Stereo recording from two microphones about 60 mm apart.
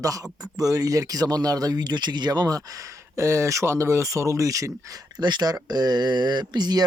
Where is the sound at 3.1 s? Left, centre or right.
Right.